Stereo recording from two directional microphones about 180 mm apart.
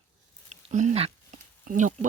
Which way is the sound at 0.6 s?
40° right (ahead or behind).